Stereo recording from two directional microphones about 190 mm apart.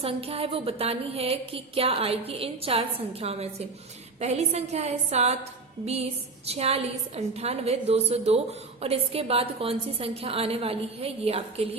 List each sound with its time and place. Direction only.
0.0 s a woman's voice: 30° right (ahead or behind)